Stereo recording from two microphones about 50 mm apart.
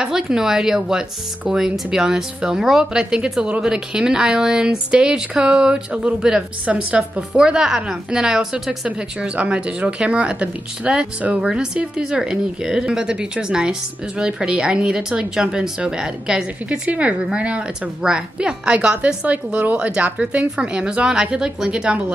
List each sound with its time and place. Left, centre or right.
0.0 s a woman's voice: centre
7.3 s speech: centre
8.8 s a woman's voice: right
19.3 s a woman's voice: right; by 21.9 s centre